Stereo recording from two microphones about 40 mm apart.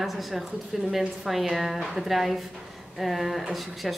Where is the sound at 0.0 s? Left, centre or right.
Centre.